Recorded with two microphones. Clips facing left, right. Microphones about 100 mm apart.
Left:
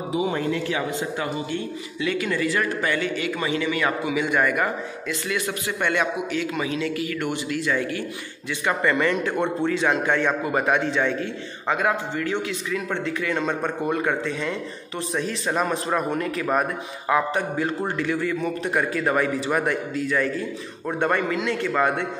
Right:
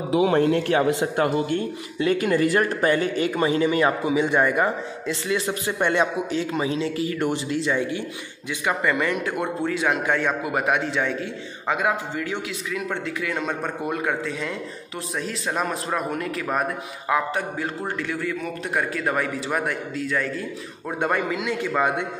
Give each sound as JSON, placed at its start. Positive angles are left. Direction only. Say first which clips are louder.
{"t": 0.1, "sound": "speech", "louder": "right 5 dB", "side_deg": -90}
{"t": 0.4, "sound": "a man's voice", "louder": "right 6 dB", "side_deg": -55}
{"t": 8.6, "sound": "a man's voice", "louder": "left 1 dB", "side_deg": -10}